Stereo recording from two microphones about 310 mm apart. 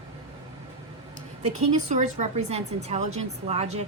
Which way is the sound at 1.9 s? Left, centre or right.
Right.